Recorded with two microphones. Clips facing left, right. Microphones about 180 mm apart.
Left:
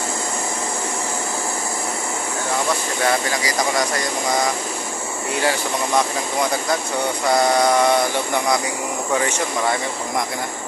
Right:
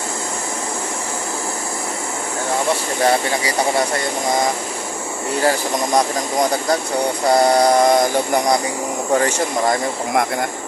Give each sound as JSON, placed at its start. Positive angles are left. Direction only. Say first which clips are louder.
{"t": 3.0, "sound": "speech", "louder": "right 4 dB", "side_deg": -30}
{"t": 5.4, "sound": "speech", "louder": "right 3 dB", "side_deg": -40}
{"t": 7.2, "sound": "speech", "louder": "right 3 dB", "side_deg": -35}